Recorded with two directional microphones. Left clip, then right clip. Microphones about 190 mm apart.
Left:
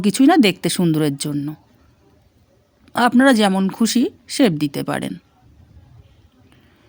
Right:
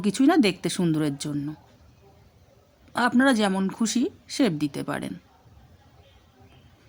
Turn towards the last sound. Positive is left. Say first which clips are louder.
# left 7 dB
turn(degrees=30)  # may be behind; listen again after turning